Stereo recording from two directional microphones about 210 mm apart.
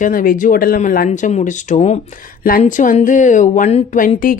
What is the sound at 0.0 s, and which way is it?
Speech, 40° left (ahead or behind).